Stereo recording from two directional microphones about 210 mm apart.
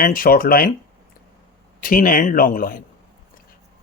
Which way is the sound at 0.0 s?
40° left (ahead or behind).